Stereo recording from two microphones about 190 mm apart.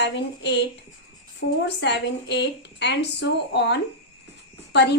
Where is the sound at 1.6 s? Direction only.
65° left (ahead or behind).